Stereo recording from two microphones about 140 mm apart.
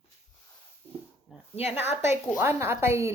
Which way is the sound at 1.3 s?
5° right (ahead or behind).